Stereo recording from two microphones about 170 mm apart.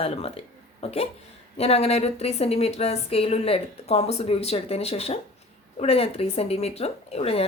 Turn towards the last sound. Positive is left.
turn(degrees=35)  # may be behind; listen again after turning